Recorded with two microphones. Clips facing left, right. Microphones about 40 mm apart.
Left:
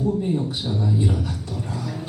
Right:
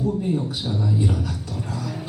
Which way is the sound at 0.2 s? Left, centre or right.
Centre.